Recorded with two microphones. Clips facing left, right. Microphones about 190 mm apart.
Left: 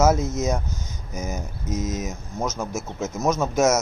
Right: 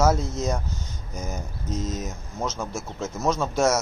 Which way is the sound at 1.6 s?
20° left (ahead or behind).